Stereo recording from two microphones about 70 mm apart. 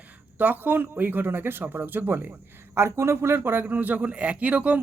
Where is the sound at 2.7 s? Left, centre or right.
Right.